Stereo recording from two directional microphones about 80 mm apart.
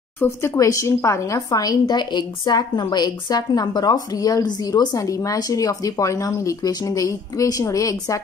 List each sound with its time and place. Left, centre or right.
0.2 s speech: left